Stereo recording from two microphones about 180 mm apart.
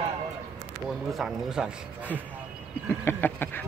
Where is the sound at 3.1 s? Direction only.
10° left (ahead or behind).